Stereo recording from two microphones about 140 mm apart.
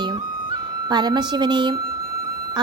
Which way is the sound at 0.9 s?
30° right (ahead or behind).